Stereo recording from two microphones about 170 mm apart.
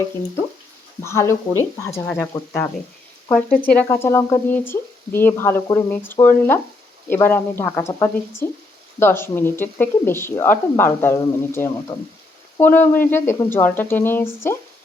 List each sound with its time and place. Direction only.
1.0 s speech: 15° left (ahead or behind)
2.0 s speech: 5° left (ahead or behind)